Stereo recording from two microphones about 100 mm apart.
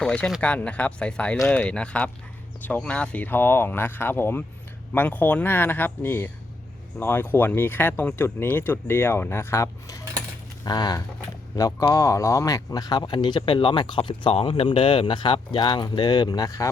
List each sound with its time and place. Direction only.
0.0 s speech: 10° left (ahead or behind); by 10.0 s 30° left (ahead or behind)
10.6 s a man's voice: 45° left (ahead or behind)